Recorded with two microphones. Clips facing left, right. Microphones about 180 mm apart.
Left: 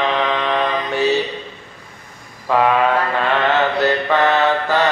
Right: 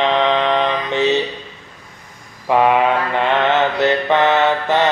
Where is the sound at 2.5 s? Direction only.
15° right (ahead or behind).